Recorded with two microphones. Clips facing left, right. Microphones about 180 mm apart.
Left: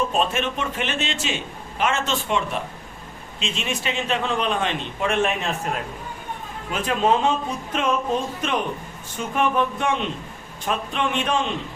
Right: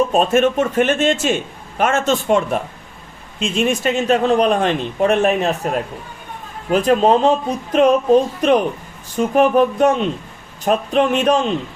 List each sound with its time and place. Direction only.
0.1 s a man's voice: 45° right (ahead or behind)